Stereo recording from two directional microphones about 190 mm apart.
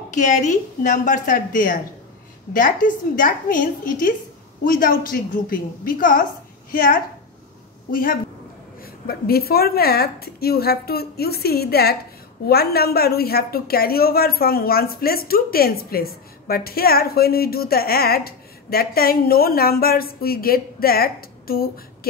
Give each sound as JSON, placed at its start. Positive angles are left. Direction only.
{"t": 0.1, "sound": "a woman's voice", "side_deg": 40}